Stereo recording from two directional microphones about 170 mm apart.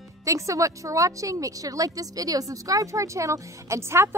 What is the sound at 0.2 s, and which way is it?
Speech, 20° right (ahead or behind).